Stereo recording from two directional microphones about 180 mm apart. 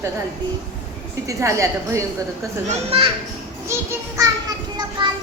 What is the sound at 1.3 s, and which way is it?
Speech, 15° right (ahead or behind).